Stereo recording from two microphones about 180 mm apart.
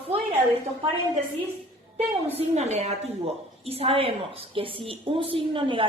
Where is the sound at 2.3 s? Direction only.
40° right (ahead or behind).